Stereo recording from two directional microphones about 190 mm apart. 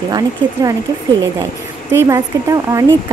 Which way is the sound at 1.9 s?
15° right (ahead or behind).